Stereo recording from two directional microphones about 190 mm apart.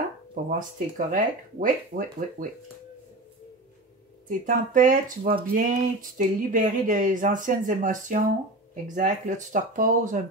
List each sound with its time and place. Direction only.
0.3 s speech: 45° right (ahead or behind)
4.3 s speech: 45° right (ahead or behind)